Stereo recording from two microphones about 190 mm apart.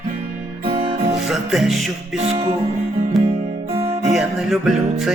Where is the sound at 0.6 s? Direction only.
25° right (ahead or behind).